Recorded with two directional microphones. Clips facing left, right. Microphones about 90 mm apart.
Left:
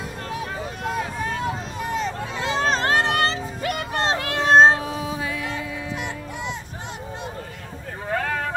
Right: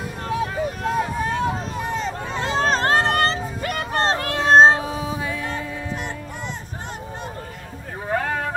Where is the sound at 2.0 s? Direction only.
40° right (ahead or behind).